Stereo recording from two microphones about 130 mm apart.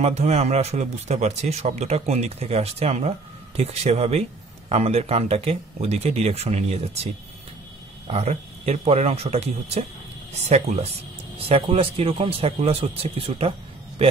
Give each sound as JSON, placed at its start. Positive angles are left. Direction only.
{"t": 0.0, "sound": "a man's voice", "side_deg": -55}
{"t": 8.1, "sound": "a man's voice", "side_deg": -50}
{"t": 11.3, "sound": "a man's voice", "side_deg": -45}